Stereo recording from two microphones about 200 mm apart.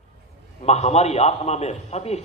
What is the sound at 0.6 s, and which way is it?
A man's voice, 30° left (ahead or behind).